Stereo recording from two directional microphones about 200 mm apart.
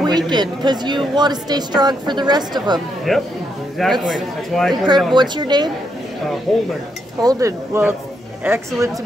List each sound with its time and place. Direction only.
0.0 s a woman's voice: 20° right (ahead or behind)
3.1 s a man's voice: centre (ahead or behind)
5.1 s a woman's voice: 20° right (ahead or behind)
7.2 s speech: 15° right (ahead or behind)